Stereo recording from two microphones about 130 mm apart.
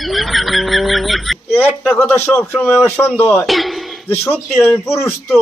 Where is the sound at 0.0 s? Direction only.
Centre (ahead or behind).